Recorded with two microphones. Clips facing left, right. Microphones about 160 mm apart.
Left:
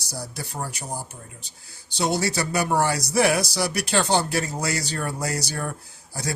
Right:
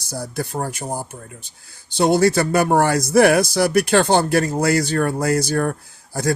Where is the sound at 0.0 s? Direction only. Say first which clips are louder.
Right 8 dB; 50° right (ahead or behind).